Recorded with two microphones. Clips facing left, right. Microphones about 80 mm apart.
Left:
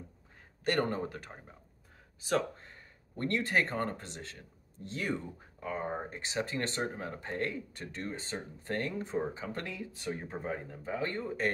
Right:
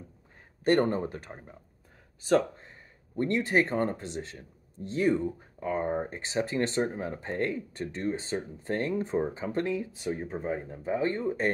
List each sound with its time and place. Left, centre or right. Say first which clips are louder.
0.7 s speech: right 6 dB; right
2.2 s a sound: right 7 dB; right
3.7 s speech: right 6 dB; right
10.2 s speech: right 5 dB; centre
10.7 s speech: right 7 dB; right